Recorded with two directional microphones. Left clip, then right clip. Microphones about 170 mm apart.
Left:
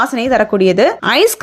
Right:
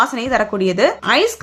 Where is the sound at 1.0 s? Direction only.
50° left (ahead or behind).